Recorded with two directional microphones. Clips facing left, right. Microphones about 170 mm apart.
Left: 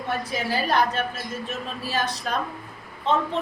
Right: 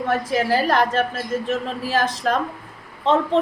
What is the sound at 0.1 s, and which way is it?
A woman's voice, 90° right.